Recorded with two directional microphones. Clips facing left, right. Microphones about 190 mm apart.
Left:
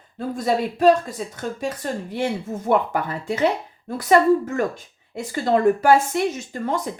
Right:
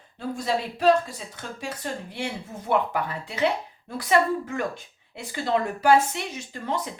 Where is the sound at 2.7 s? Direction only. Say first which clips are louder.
Left 4 dB; 45° left (ahead or behind).